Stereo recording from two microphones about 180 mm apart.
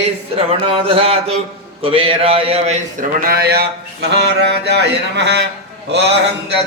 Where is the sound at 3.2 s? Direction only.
60° right (ahead or behind).